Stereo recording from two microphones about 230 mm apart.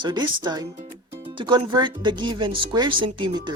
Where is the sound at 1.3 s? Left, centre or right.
Right.